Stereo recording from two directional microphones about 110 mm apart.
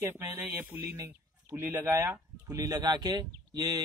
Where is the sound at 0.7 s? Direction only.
15° right (ahead or behind).